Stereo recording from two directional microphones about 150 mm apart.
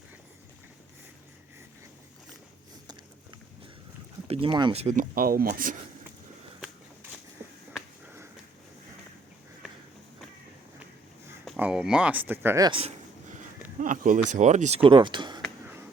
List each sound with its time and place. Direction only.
4.3 s speech: 35° right (ahead or behind)
4.8 s speech: 60° right (ahead or behind)
11.4 s speech: 5° right (ahead or behind)
12.6 s speech: 35° right (ahead or behind)
13.7 s speech: 60° right (ahead or behind)
14.8 s speech: 35° right (ahead or behind)